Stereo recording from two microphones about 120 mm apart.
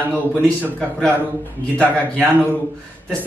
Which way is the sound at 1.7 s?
15° left (ahead or behind).